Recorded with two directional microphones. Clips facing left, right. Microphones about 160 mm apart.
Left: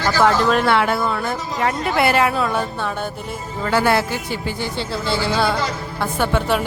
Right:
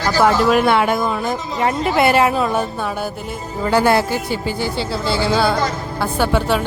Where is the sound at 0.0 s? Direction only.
10° right (ahead or behind).